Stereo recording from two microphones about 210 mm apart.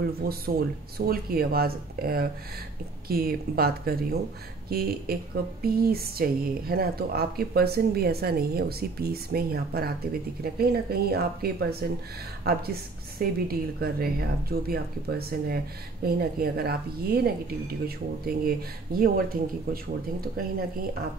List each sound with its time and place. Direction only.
0.0 s speech: 45° right (ahead or behind)